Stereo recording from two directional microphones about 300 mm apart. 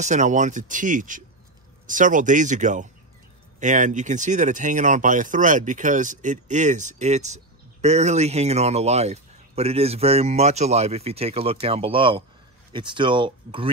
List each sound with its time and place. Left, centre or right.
0.0 s speech: right